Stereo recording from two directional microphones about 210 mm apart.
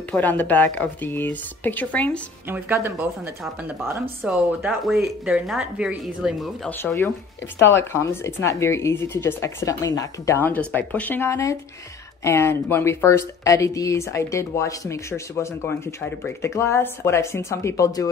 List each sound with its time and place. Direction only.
0.1 s speech: 10° left (ahead or behind)
2.5 s speech: 10° right (ahead or behind)
4.2 s speech: centre (ahead or behind)
6.8 s speech: 10° left (ahead or behind)